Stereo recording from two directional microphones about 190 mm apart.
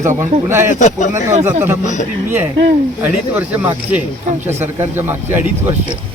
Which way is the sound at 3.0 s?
10° right (ahead or behind).